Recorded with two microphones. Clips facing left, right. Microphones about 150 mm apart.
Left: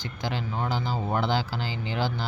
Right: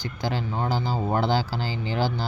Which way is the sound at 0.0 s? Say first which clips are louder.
Right 3 dB; 40° right (ahead or behind).